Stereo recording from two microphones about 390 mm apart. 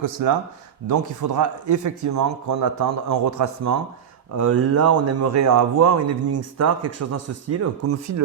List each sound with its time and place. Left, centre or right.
0.0 s speech: right